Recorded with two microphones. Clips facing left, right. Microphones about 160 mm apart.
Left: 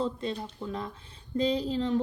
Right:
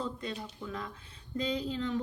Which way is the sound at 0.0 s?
30° left (ahead or behind).